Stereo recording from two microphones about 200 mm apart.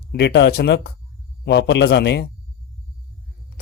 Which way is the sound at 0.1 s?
55° left (ahead or behind).